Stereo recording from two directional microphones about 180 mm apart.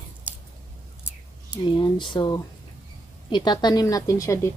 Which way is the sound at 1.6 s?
25° left (ahead or behind).